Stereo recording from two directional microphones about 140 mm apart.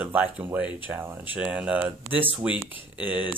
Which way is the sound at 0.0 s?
15° right (ahead or behind).